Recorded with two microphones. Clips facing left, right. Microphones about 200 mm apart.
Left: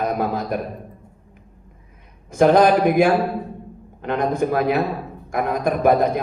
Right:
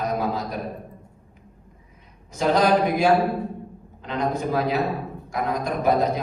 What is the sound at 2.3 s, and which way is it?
A man's voice, 55° left (ahead or behind).